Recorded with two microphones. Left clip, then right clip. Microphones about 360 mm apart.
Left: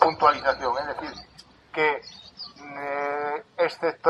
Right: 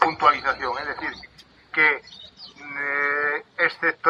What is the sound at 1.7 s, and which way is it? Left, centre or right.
Speech, centre.